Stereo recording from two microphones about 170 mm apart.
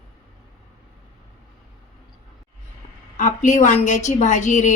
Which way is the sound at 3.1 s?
50° left (ahead or behind).